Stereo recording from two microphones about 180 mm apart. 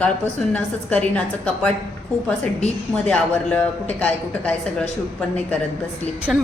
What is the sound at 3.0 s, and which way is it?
Speech, 5° left (ahead or behind).